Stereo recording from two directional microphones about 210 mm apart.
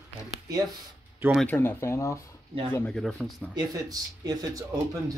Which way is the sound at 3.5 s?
20° right (ahead or behind).